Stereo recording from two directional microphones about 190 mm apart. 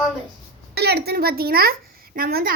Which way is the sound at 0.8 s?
60° right (ahead or behind).